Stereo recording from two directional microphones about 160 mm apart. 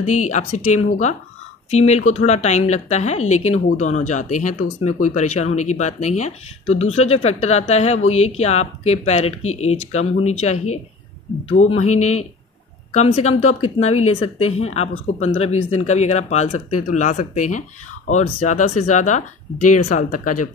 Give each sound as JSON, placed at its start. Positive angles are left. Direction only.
{"t": 0.0, "sound": "speech", "side_deg": 45}